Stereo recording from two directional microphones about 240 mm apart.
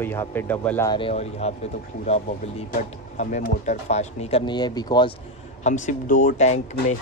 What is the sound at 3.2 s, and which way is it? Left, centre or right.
Speech, left.